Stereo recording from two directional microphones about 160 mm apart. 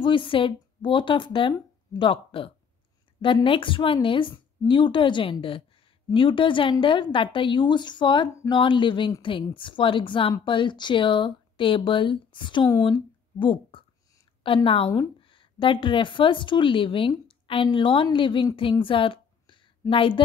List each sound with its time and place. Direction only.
0.0 s a woman's voice: 30° left (ahead or behind)
12.8 s a sound: 30° left (ahead or behind)
14.4 s a woman's voice: 35° left (ahead or behind)